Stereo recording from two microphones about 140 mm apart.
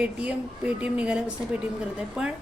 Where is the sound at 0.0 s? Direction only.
10° right (ahead or behind).